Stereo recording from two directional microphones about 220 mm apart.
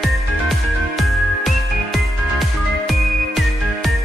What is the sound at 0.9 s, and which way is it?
Music, centre (ahead or behind).